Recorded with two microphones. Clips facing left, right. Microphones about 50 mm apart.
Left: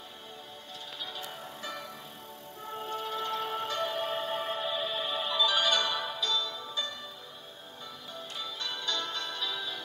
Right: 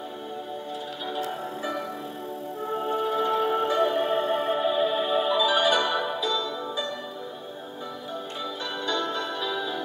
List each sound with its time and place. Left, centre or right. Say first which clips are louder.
1.6 s music: right 10 dB; centre
8.8 s music: right 8 dB; centre